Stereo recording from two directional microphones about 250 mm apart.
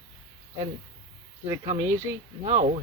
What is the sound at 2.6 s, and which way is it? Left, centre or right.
Speech, right.